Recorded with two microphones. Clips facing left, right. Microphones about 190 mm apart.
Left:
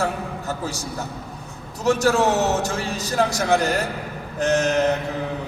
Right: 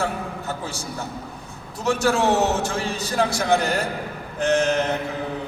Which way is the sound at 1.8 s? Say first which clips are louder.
Left 2 dB; 40° left (ahead or behind).